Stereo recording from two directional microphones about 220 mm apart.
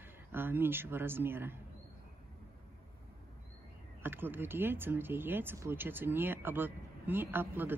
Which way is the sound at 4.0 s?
10° right (ahead or behind).